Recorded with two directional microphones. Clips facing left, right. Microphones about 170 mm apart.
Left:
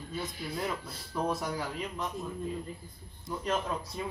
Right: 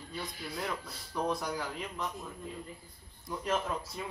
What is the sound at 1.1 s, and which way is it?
Speech, centre (ahead or behind).